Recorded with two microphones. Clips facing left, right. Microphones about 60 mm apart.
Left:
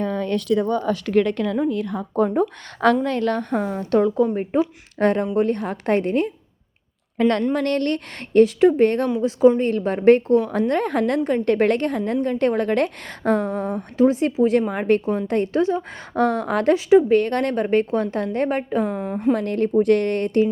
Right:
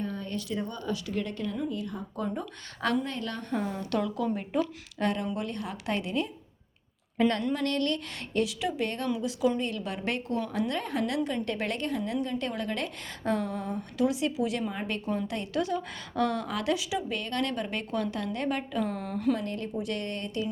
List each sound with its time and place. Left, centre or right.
0.0 s a woman's voice: left
4.9 s a woman's voice: left
7.2 s a woman's voice: centre
7.5 s a woman's voice: left
9.0 s a woman's voice: left
14.7 s a woman's voice: left
19.3 s a woman's voice: left